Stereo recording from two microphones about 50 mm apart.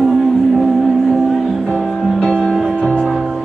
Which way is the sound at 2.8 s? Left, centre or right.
Centre.